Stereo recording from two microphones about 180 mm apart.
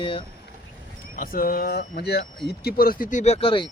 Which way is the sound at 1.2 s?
55° left (ahead or behind).